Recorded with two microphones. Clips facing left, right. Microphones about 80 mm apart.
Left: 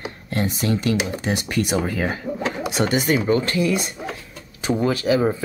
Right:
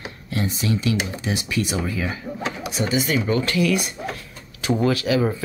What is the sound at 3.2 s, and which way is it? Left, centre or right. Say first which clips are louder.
Speech: left 1 dB; left.